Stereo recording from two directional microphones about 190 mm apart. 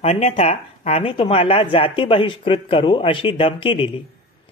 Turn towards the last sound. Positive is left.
turn(degrees=30)  # may be behind; listen again after turning